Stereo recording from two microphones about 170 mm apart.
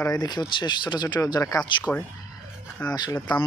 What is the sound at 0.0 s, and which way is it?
Speech, 20° left (ahead or behind).